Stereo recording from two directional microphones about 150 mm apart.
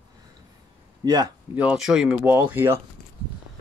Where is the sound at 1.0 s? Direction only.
25° right (ahead or behind).